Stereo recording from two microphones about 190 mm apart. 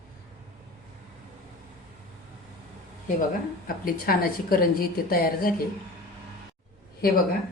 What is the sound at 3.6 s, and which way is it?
A woman's voice, 50° left (ahead or behind).